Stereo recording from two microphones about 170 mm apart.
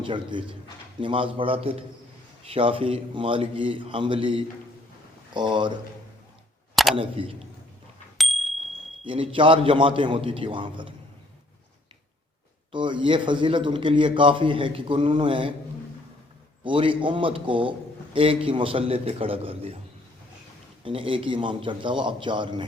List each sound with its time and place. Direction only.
0.0 s a man's voice: 30° right (ahead or behind)
6.9 s a man's voice: 30° right (ahead or behind)
8.2 s a sound: centre (ahead or behind)
9.0 s a man's voice: 30° right (ahead or behind)
12.7 s a man's voice: 30° right (ahead or behind)
16.6 s a man's voice: 30° right (ahead or behind)
20.8 s a man's voice: 30° right (ahead or behind)